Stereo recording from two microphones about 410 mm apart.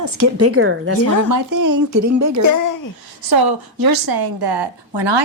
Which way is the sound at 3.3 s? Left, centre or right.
Right.